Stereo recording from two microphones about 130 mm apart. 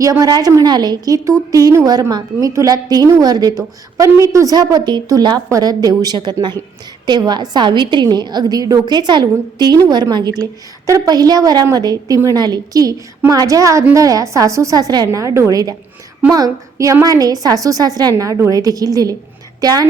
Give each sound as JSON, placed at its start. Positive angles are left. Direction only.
{"t": 0.0, "sound": "a woman's voice", "side_deg": -25}